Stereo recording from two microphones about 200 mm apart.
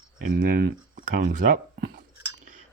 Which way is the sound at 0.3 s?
50° right (ahead or behind).